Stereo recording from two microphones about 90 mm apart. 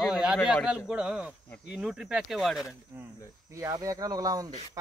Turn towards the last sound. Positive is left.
turn(degrees=-40)  # may be behind; listen again after turning